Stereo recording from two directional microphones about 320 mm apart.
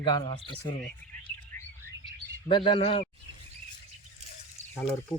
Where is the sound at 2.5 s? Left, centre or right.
Centre.